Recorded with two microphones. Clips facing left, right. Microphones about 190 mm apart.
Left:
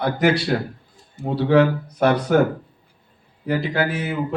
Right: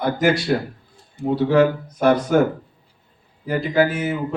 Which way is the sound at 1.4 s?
65° left (ahead or behind).